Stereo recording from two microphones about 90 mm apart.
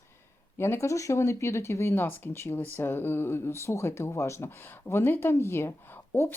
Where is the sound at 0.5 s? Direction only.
30° left (ahead or behind).